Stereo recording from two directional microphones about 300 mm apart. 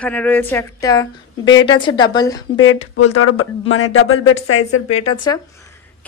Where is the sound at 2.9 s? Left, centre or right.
Left.